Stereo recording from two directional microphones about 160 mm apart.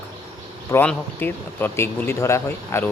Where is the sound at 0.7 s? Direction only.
10° left (ahead or behind).